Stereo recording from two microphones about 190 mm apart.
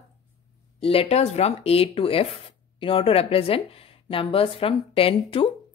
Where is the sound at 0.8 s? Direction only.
30° left (ahead or behind).